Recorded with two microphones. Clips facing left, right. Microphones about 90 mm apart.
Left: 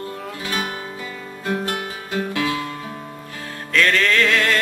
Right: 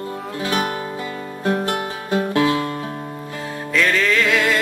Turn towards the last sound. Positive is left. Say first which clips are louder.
# even
turn(degrees=-5)  # may be behind; listen again after turning